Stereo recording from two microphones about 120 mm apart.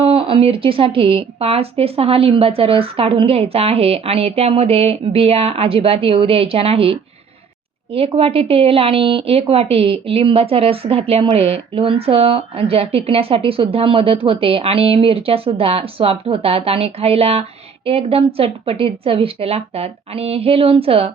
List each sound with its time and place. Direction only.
0.0 s speech: 50° right (ahead or behind)